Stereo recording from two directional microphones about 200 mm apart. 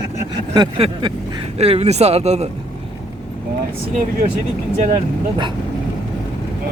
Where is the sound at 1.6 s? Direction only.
30° right (ahead or behind).